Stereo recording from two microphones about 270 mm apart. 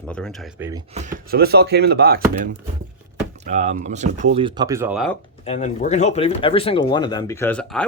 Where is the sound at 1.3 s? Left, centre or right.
Right; by 5.1 s centre.